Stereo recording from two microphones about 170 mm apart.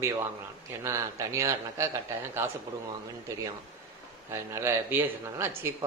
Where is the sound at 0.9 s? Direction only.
15° right (ahead or behind).